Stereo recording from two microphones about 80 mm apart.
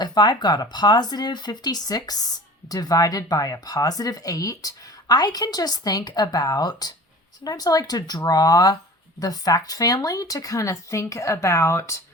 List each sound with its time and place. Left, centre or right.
0.0 s speech: left